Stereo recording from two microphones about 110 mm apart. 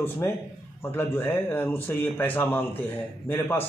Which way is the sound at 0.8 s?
20° left (ahead or behind).